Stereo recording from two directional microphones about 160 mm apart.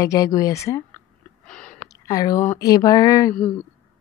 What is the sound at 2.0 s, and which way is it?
A woman's voice, 20° left (ahead or behind).